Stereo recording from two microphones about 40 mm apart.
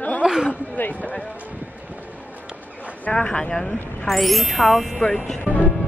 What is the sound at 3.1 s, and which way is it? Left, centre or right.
Speech, centre.